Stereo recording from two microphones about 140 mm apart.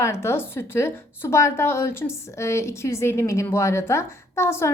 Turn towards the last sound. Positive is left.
turn(degrees=20)  # may be behind; listen again after turning